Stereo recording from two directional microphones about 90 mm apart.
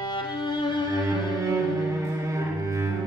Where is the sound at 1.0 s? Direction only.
35° right (ahead or behind).